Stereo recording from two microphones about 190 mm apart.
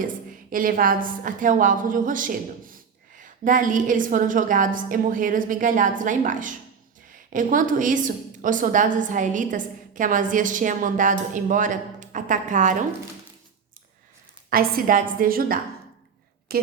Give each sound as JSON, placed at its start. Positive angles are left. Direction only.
{"t": 0.5, "sound": "a woman's voice", "side_deg": -50}
{"t": 14.5, "sound": "a woman's voice", "side_deg": -50}